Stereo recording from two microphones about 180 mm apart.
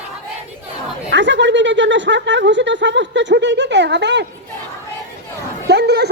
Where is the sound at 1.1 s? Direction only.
85° right.